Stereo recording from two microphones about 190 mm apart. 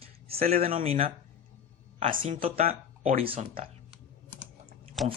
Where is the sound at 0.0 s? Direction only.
30° right (ahead or behind).